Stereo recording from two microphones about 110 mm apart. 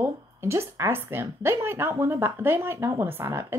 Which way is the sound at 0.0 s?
25° right (ahead or behind).